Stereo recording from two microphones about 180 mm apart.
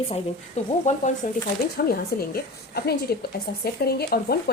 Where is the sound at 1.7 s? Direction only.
55° left (ahead or behind).